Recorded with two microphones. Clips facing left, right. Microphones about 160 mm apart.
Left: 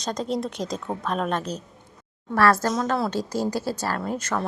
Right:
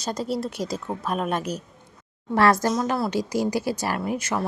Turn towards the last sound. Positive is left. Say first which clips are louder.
# right 1 dB
turn(degrees=-10)  # may be behind; listen again after turning